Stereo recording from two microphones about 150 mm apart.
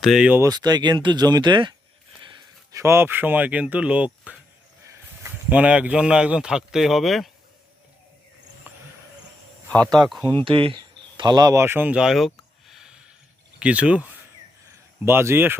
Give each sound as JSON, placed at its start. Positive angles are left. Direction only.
{"t": 0.0, "sound": "a man's voice", "side_deg": -5}
{"t": 0.4, "sound": "speech", "side_deg": -25}
{"t": 2.7, "sound": "a man's voice", "side_deg": -15}
{"t": 8.7, "sound": "a sound", "side_deg": -15}
{"t": 9.6, "sound": "speech", "side_deg": 10}
{"t": 10.4, "sound": "speech", "side_deg": -35}
{"t": 11.2, "sound": "speech", "side_deg": -25}